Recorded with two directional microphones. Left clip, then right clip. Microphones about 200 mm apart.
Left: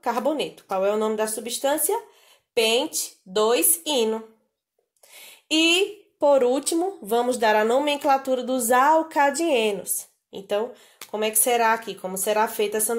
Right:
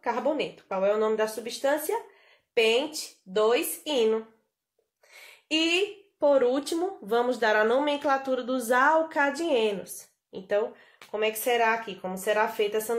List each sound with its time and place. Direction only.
0.0 s speech: 40° left (ahead or behind)
5.5 s speech: 35° left (ahead or behind)